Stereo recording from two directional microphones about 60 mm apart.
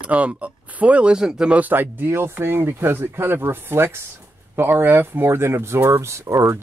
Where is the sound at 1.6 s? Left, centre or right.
Right.